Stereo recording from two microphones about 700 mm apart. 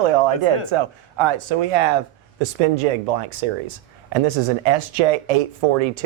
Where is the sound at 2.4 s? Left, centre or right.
Right.